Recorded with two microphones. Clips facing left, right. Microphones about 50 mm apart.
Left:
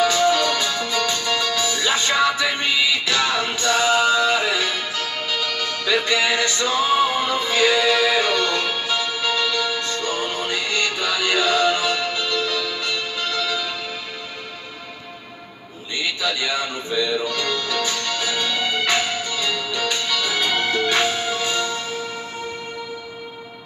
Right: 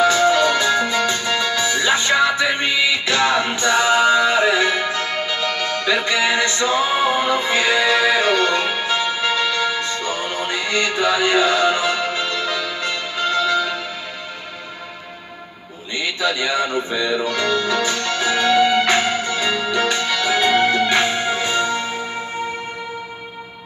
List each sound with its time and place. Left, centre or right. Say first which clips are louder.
0.3 s music: right 4 dB; right
5.9 s music: right 1 dB; centre
13.2 s music: right 9 dB; right
16.2 s music: right 6 dB; centre